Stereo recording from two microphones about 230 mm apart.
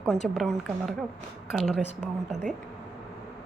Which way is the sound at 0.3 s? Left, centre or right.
Centre.